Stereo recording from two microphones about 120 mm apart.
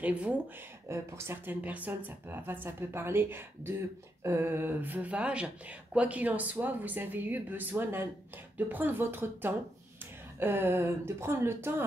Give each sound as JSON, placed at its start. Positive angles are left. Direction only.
{"t": 0.0, "sound": "speech", "side_deg": -10}
{"t": 0.8, "sound": "speech", "side_deg": -20}